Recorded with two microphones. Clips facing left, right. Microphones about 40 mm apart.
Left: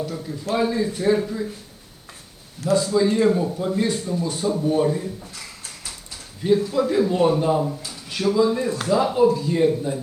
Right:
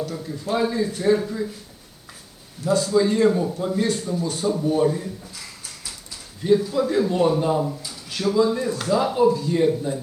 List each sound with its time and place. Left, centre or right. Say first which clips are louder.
0.0 s a man's voice: even; centre
2.7 s a man's voice: even; centre
6.7 s a man's voice: left 1 dB; centre